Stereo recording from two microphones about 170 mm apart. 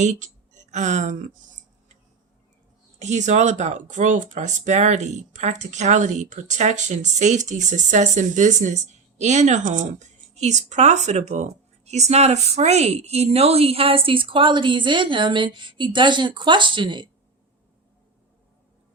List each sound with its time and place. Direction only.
0.0 s speech: 45° right (ahead or behind)
3.0 s speech: 45° right (ahead or behind); by 17.1 s 30° right (ahead or behind)